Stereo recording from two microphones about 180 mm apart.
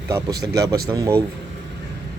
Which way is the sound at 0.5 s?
20° right (ahead or behind).